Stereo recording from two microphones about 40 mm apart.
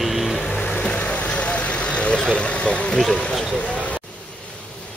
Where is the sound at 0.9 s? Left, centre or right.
Left.